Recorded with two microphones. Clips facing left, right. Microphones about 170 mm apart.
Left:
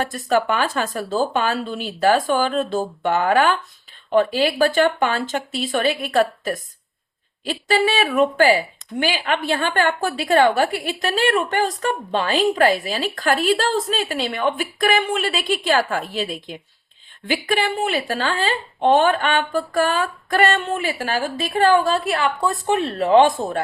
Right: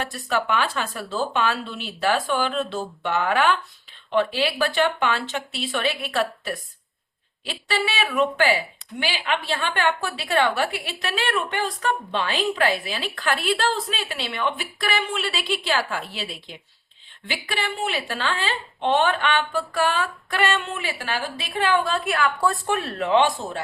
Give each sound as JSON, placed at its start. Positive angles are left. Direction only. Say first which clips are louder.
{"t": 0.0, "sound": "speech", "louder": "left 6 dB", "side_deg": 45}
{"t": 7.7, "sound": "speech", "louder": "left 6 dB", "side_deg": 45}
{"t": 23.0, "sound": "speech", "louder": "left 6 dB", "side_deg": 40}